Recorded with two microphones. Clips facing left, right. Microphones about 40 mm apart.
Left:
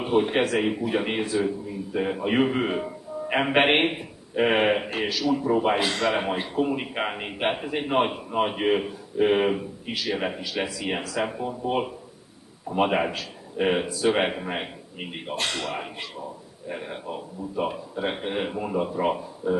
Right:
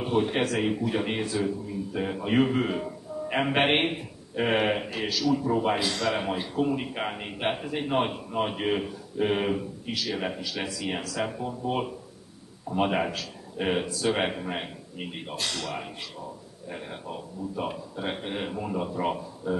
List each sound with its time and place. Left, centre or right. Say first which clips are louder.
0.0 s a man's voice: left 3 dB; centre
4.8 s a man's voice: left 4 dB; left
5.1 s a man's voice: left 1 dB; centre